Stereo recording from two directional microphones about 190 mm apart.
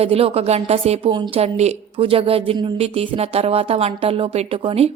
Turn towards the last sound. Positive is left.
turn(degrees=-30)  # may be behind; listen again after turning